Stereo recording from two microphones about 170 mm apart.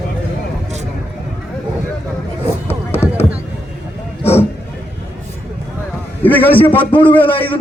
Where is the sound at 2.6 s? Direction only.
15° left (ahead or behind).